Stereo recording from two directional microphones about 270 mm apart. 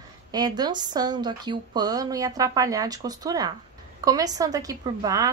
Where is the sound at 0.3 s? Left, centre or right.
Centre.